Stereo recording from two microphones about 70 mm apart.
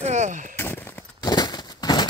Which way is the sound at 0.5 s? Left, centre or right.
Left.